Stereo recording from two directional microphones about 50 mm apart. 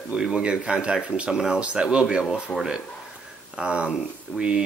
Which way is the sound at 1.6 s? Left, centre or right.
Right.